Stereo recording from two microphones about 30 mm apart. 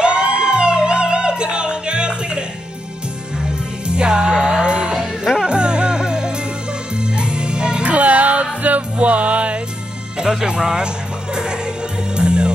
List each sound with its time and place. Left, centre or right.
0.0 s music: right
3.8 s music: right
7.8 s music: right
10.4 s speech: right
12.2 s music: right